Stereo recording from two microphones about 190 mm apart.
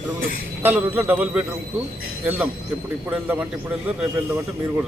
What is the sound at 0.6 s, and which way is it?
A man's voice, 10° right (ahead or behind).